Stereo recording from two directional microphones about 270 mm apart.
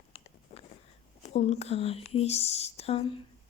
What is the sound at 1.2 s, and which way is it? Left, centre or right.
A woman's voice, left.